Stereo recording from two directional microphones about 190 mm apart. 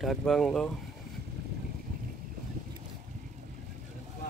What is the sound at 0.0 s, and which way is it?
Speech, centre (ahead or behind).